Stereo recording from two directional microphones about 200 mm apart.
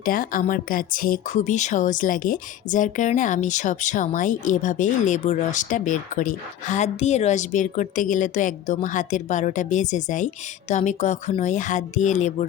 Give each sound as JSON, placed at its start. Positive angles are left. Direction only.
{"t": 0.0, "sound": "a woman's voice", "side_deg": 45}